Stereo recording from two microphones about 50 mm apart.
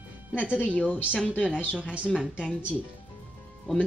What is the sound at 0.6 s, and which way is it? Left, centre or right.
Speech, left.